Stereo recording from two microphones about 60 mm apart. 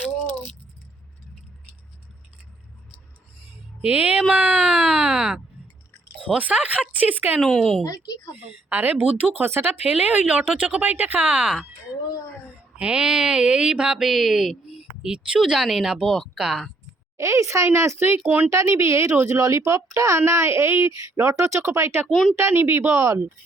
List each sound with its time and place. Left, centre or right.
3.8 s speech: right
7.4 s a woman's voice: centre
7.9 s a woman's voice: left
8.4 s speech: right
9.4 s speech: right
10.0 s speech: right
12.7 s speech: centre
14.0 s speech: centre
17.2 s speech: right
17.7 s speech: right
22.1 s speech: centre
22.4 s speech: right
22.9 s speech: right